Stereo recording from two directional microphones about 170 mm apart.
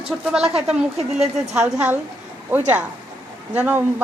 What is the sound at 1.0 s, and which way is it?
Speech, 40° right (ahead or behind).